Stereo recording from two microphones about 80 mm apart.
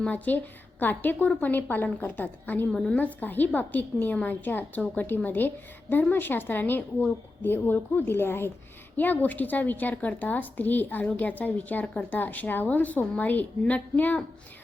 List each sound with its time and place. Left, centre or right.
0.0 s a woman's voice: centre